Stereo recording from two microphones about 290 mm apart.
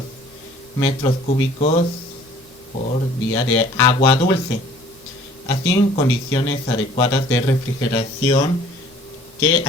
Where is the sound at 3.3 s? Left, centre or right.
Centre.